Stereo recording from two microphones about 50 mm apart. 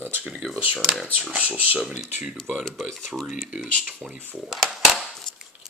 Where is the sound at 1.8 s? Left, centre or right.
Centre.